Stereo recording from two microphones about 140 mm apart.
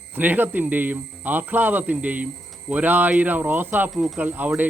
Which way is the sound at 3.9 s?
Centre (ahead or behind).